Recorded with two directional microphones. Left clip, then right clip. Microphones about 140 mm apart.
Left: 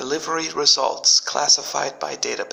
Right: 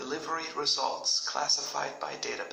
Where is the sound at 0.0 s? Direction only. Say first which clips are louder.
Left 10 dB; 50° left (ahead or behind).